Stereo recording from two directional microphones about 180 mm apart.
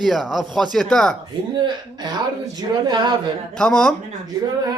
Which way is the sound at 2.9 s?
25° right (ahead or behind).